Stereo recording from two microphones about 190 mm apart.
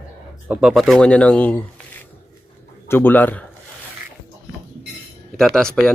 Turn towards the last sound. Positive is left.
turn(degrees=5)  # may be behind; listen again after turning